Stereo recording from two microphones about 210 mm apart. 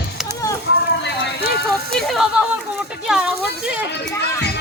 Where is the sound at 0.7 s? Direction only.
55° left (ahead or behind).